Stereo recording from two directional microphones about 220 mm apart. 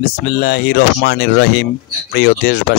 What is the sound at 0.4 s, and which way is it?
Speech, 50° left (ahead or behind).